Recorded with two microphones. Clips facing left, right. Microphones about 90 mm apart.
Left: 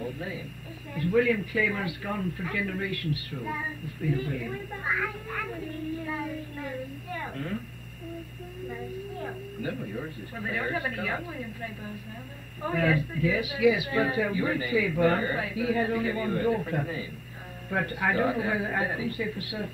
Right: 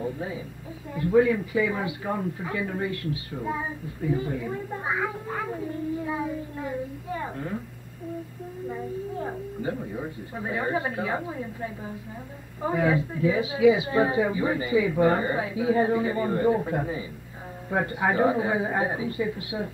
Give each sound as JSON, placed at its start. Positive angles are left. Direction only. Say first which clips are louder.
{"t": 0.0, "sound": "a woman's voice", "louder": "right 4 dB", "side_deg": -25}
{"t": 8.6, "sound": "a man's voice", "louder": "right 4 dB", "side_deg": -25}